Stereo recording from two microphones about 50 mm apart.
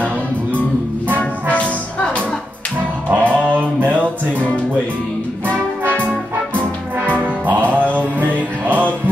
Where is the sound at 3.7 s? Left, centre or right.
Right.